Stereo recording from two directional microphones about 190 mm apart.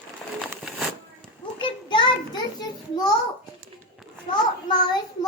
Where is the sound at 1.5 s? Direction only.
25° left (ahead or behind).